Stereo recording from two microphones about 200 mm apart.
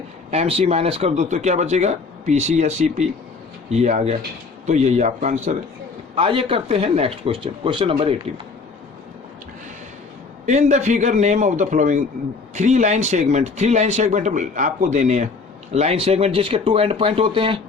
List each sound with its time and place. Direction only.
0.3 s speech: 30° right (ahead or behind)
10.4 s speech: 35° right (ahead or behind)